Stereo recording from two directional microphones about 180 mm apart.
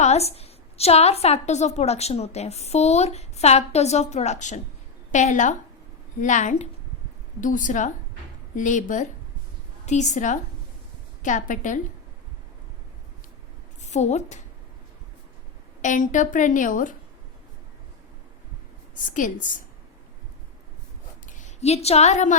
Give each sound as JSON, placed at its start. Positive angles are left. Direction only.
{"t": 0.0, "sound": "a woman's voice", "side_deg": 35}
{"t": 13.8, "sound": "a woman's voice", "side_deg": 40}
{"t": 15.8, "sound": "a woman's voice", "side_deg": 45}
{"t": 19.0, "sound": "a woman's voice", "side_deg": 45}
{"t": 21.3, "sound": "a woman's voice", "side_deg": 40}